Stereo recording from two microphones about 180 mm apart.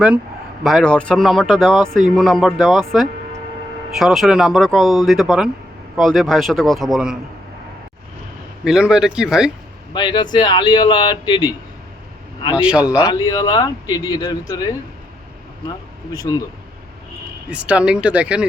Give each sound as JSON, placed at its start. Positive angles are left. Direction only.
{"t": 0.6, "sound": "speech", "side_deg": 0}
{"t": 8.6, "sound": "speech", "side_deg": -5}
{"t": 9.9, "sound": "speech", "side_deg": 25}
{"t": 12.5, "sound": "speech", "side_deg": -5}
{"t": 12.8, "sound": "speech", "side_deg": 20}
{"t": 16.1, "sound": "speech", "side_deg": 20}
{"t": 17.5, "sound": "speech", "side_deg": -5}